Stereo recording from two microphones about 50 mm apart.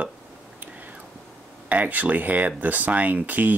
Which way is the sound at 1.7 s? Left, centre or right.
Right.